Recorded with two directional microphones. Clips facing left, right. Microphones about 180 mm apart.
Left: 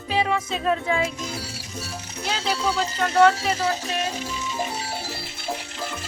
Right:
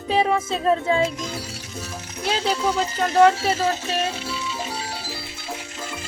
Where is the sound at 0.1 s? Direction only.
30° right (ahead or behind).